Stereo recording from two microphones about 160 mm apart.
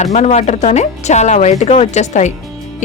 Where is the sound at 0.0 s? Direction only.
45° left (ahead or behind).